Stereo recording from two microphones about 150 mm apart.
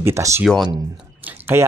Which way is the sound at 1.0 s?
10° right (ahead or behind).